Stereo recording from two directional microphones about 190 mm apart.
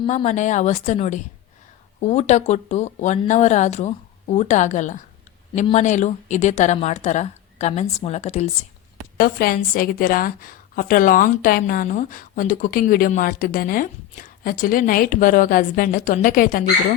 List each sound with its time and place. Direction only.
0.2 s speech: 40° left (ahead or behind)
9.1 s a woman's voice: 50° left (ahead or behind)